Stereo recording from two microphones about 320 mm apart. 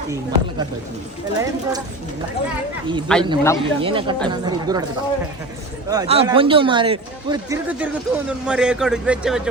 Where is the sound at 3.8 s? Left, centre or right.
Centre.